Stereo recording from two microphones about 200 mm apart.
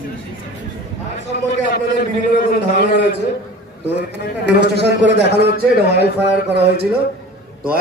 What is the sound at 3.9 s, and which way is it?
A man's voice, 60° right (ahead or behind).